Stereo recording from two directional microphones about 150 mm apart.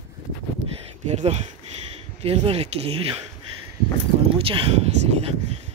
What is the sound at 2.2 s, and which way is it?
Speech, 40° right (ahead or behind).